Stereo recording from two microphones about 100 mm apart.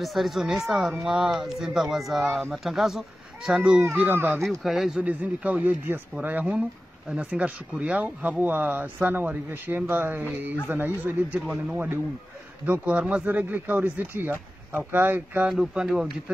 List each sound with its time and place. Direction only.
0.0 s speech: centre (ahead or behind)
3.8 s speech: 20° right (ahead or behind)
4.4 s speech: centre (ahead or behind)
5.0 s speech: 15° right (ahead or behind)
15.5 s speech: 5° right (ahead or behind)